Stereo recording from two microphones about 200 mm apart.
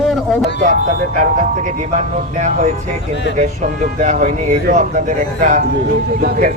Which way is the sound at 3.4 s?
40° right (ahead or behind).